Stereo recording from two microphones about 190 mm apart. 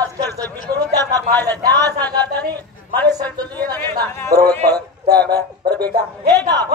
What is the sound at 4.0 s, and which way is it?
Speech, 20° right (ahead or behind).